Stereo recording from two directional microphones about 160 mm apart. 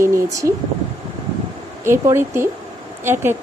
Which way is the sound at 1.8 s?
15° right (ahead or behind).